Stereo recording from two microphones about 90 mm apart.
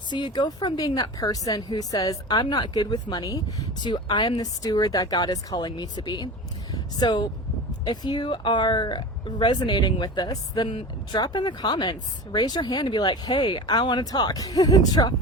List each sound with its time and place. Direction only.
0.1 s speech: 55° left (ahead or behind)